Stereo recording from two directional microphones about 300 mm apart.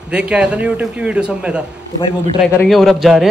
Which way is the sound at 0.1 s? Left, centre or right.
Centre.